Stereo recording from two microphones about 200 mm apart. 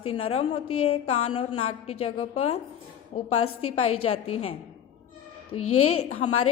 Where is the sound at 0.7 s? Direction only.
90° left.